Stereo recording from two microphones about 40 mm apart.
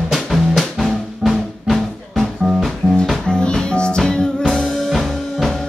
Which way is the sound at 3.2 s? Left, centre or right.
Left.